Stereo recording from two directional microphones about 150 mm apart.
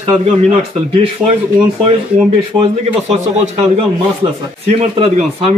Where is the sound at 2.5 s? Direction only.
30° right (ahead or behind).